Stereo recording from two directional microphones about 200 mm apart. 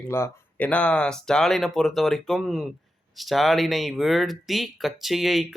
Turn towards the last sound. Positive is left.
turn(degrees=0)  # may be behind; listen again after turning